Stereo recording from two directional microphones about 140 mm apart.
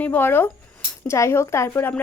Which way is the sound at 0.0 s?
15° left (ahead or behind).